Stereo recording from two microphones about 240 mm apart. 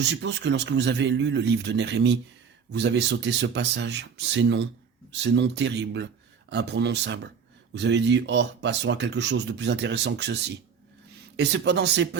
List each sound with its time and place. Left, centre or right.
0.0 s speech: right
11.3 s speech: right